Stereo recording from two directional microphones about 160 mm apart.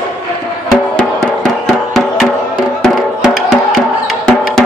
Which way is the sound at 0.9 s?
Centre (ahead or behind).